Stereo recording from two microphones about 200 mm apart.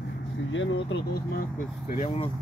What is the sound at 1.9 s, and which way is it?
Speech, 35° left (ahead or behind).